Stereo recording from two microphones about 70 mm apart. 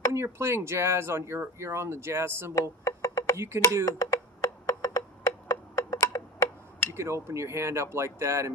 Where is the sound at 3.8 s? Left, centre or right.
Left.